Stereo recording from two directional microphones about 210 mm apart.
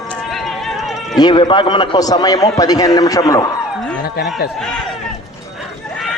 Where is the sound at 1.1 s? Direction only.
20° left (ahead or behind).